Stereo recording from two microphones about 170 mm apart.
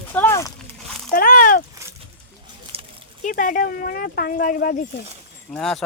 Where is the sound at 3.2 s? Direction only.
55° left (ahead or behind).